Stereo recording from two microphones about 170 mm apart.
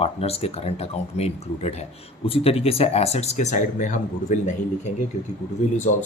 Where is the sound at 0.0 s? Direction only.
35° left (ahead or behind).